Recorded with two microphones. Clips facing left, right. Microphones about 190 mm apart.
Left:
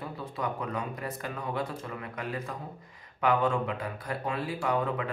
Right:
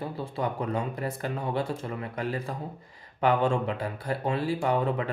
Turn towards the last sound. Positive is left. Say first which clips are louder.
# right 3 dB
turn(degrees=-30)  # may be behind; listen again after turning